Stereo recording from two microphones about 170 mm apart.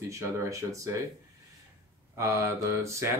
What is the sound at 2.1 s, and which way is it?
Mantra, 15° right (ahead or behind).